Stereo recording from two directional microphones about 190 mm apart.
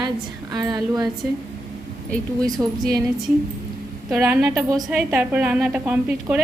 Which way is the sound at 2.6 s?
10° right (ahead or behind).